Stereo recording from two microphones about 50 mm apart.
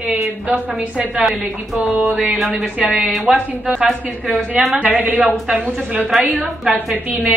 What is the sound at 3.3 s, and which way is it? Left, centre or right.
A woman's voice, centre.